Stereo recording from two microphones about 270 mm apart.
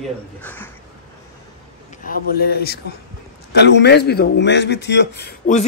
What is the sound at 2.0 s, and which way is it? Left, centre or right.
A man's voice, left.